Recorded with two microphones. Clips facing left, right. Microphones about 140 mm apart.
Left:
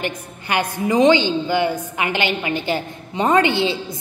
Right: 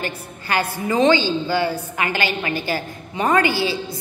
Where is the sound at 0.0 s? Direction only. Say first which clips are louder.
Left 2 dB; 20° left (ahead or behind).